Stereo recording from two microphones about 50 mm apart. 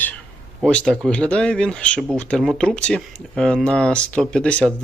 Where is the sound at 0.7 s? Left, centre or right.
Centre.